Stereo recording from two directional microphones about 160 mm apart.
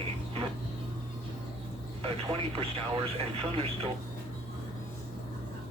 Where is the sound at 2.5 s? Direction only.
35° right (ahead or behind).